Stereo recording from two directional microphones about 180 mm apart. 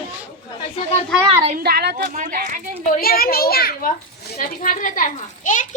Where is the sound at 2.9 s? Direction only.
55° left (ahead or behind).